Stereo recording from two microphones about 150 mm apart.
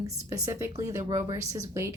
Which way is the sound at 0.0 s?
25° right (ahead or behind).